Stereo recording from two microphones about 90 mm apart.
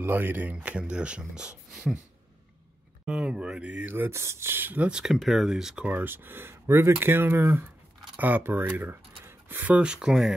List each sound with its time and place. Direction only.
0.0 s speech: 25° right (ahead or behind); by 2.0 s 5° right (ahead or behind)
3.1 s speech: 10° right (ahead or behind)